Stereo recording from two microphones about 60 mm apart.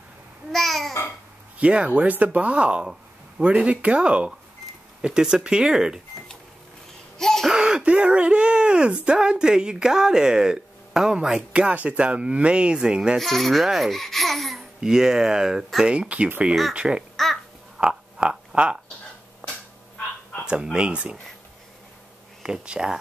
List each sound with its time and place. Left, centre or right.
0.5 s babbling: centre
1.6 s speech: centre
7.2 s a sound: centre
7.4 s speech: centre
13.2 s speech: centre
14.8 s speech: centre
17.7 s a sound: centre
20.7 s speech: centre
22.4 s speech: centre